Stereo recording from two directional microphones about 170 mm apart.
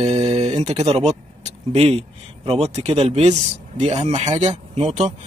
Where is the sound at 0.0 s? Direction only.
35° right (ahead or behind).